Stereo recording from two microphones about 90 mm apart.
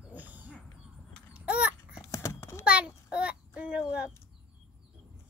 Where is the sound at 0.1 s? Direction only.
20° right (ahead or behind).